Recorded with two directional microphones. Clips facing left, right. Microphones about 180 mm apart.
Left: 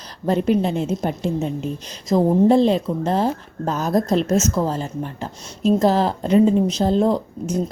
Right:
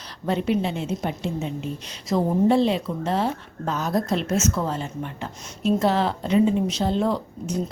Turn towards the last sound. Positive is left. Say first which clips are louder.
# left 5 dB
turn(degrees=40)  # may be behind; listen again after turning